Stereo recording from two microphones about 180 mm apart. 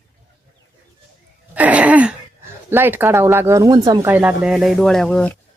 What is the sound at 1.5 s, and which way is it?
Throat clearing, 10° right (ahead or behind).